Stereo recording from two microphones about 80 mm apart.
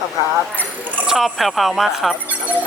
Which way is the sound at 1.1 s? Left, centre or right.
Centre.